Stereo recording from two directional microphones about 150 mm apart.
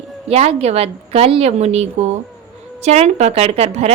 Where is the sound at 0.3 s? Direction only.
45° right (ahead or behind).